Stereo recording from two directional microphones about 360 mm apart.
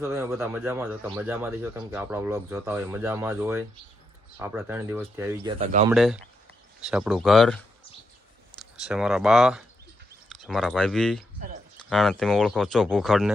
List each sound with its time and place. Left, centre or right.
0.0 s speech: centre
5.9 s speech: centre
8.7 s speech: centre